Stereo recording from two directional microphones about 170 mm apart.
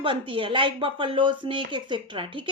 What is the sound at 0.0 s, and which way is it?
Speech, 30° right (ahead or behind).